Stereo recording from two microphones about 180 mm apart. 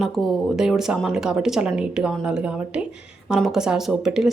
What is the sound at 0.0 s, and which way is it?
Speech, centre (ahead or behind).